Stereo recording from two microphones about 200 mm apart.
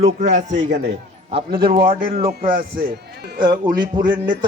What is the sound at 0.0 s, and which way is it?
Speech, 40° right (ahead or behind).